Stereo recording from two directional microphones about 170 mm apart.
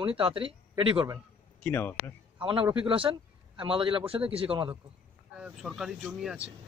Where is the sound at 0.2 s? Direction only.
30° right (ahead or behind).